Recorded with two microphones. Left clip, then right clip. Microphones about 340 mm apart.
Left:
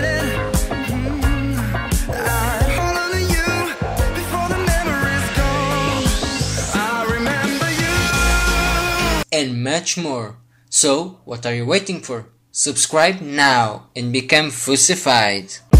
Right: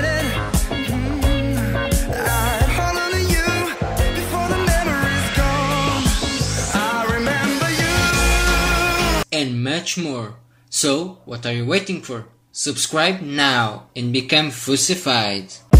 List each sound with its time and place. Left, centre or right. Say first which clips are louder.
0.0 s music: left 1 dB; centre
9.3 s a sound: left 3 dB; centre
10.7 s speech: left 3 dB; centre
15.7 s music: even; centre